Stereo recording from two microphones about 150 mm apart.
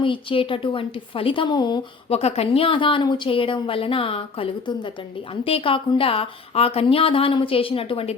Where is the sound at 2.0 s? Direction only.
45° left (ahead or behind).